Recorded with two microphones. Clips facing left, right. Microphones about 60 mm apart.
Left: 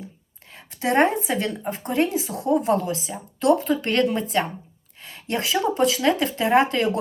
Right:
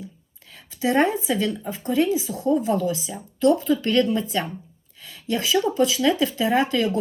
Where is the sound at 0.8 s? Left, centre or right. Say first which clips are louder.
Left 1 dB; left.